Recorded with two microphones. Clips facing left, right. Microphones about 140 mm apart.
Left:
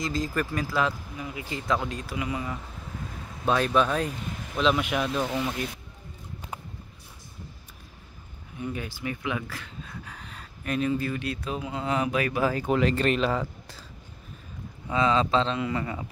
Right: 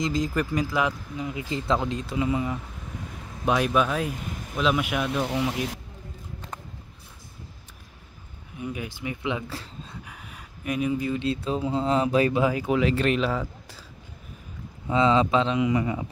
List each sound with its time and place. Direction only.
0.0 s speech: 20° right (ahead or behind)
3.4 s speech: 15° right (ahead or behind)
8.5 s speech: 10° right (ahead or behind); by 9.9 s 25° right (ahead or behind)
10.0 s speech: 10° right (ahead or behind); by 12.4 s 25° right (ahead or behind)
12.4 s speech: 5° right (ahead or behind)
14.9 s speech: 20° right (ahead or behind)